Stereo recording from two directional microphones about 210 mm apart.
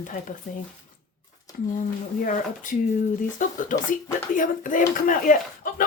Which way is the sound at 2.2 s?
40° left (ahead or behind).